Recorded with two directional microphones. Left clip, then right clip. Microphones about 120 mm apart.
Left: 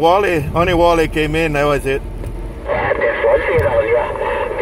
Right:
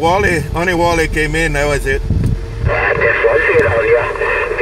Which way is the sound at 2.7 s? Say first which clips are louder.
Right 3 dB; 25° right (ahead or behind).